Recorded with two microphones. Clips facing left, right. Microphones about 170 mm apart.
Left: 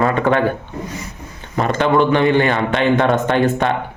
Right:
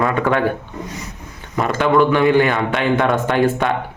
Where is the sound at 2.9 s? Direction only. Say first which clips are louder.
Left 2 dB; 25° left (ahead or behind).